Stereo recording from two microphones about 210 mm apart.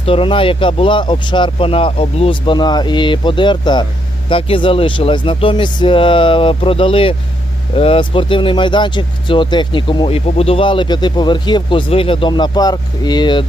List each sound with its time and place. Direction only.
0.0 s speech: 25° left (ahead or behind)